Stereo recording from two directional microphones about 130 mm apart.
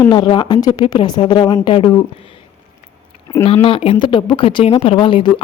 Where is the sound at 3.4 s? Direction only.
50° left (ahead or behind).